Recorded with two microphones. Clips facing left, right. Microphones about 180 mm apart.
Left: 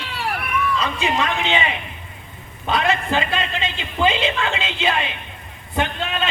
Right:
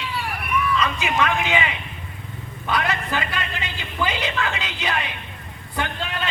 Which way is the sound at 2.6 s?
25° left (ahead or behind).